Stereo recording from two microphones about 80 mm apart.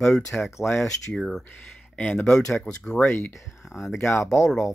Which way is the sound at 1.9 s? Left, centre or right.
Centre.